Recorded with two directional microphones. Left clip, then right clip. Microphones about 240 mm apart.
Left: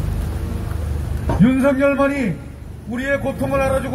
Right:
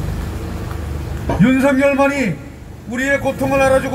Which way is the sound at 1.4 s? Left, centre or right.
Right.